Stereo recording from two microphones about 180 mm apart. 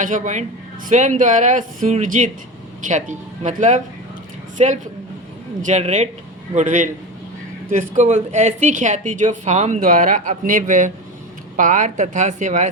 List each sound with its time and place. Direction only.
0.0 s a woman's voice: 45° right (ahead or behind)